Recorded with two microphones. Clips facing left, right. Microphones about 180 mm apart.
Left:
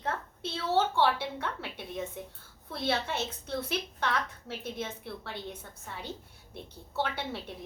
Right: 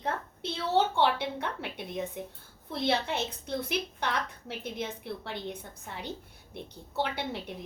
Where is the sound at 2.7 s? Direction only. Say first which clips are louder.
Right 2 dB; 15° right (ahead or behind).